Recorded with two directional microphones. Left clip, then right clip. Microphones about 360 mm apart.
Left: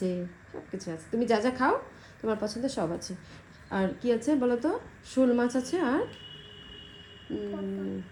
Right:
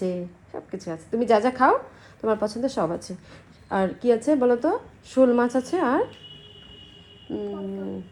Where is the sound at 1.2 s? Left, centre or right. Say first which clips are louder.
Right 7 dB; centre.